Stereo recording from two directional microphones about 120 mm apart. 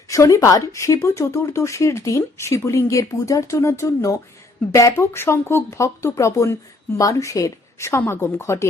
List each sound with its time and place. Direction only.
0.1 s speech: 25° left (ahead or behind)